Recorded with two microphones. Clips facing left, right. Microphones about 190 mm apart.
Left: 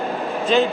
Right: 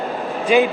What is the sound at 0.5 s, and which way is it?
Speech, 10° right (ahead or behind).